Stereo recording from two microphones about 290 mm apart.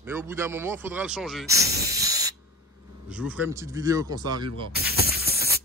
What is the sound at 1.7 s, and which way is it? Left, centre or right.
Spray, right.